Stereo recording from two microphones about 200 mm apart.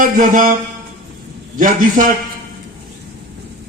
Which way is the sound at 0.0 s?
40° right (ahead or behind).